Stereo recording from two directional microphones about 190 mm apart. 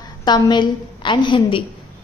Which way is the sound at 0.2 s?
25° left (ahead or behind).